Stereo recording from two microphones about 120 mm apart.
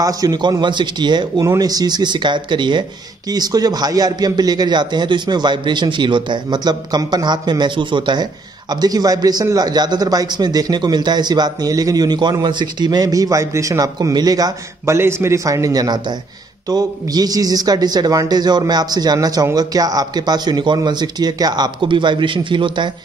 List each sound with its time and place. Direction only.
0.0 s a man's voice: 30° right (ahead or behind)
15.0 s a man's voice: 20° right (ahead or behind); by 22.8 s 40° right (ahead or behind)